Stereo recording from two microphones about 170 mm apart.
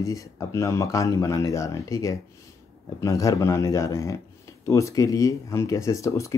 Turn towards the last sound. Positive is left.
turn(degrees=20)  # may be behind; listen again after turning